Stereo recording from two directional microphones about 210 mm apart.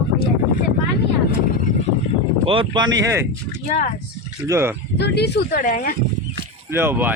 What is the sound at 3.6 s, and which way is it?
Speech, 35° left (ahead or behind).